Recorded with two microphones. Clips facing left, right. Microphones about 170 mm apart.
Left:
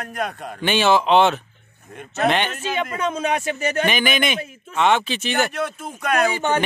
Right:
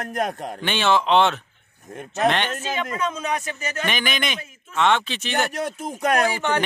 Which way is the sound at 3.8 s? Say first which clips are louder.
Left 3 dB; 5° left (ahead or behind).